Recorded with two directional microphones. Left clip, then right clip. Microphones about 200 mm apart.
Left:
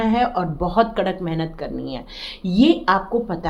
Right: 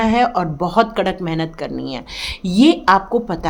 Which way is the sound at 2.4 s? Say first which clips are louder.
Right 4 dB; 40° right (ahead or behind).